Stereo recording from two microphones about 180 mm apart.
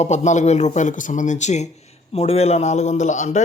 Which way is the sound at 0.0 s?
40° left (ahead or behind).